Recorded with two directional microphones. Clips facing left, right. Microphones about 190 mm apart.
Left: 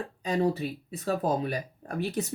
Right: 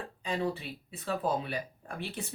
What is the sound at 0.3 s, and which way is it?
Speech, 40° left (ahead or behind).